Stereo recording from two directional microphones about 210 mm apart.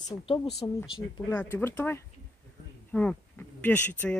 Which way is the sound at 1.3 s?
10° left (ahead or behind).